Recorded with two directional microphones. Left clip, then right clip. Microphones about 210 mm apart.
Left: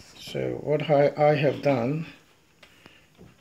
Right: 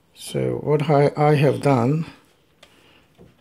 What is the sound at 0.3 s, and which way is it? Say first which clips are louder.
Speech: right 5 dB; 50° right (ahead or behind).